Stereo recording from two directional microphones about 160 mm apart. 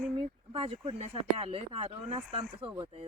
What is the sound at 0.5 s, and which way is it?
Speech, 35° right (ahead or behind).